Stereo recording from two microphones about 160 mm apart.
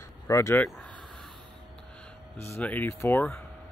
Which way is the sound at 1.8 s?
5° left (ahead or behind).